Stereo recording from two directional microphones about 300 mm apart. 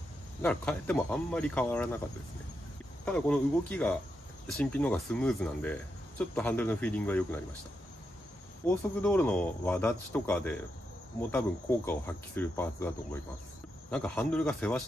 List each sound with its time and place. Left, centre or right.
0.4 s speech: centre
3.1 s speech: centre
8.6 s speech: centre
11.2 s cricket: centre
13.8 s speech: centre